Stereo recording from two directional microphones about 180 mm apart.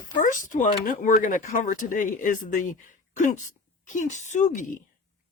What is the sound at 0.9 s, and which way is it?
Speech, 45° left (ahead or behind).